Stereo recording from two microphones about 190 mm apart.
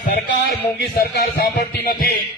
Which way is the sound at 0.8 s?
60° left (ahead or behind).